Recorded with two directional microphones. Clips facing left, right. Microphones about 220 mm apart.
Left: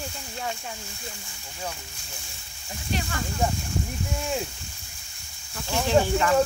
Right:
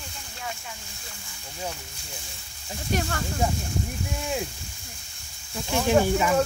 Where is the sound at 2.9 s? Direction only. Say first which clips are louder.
Right 4 dB; 45° right (ahead or behind).